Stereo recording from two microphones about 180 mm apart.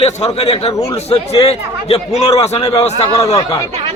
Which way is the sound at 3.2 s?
20° left (ahead or behind).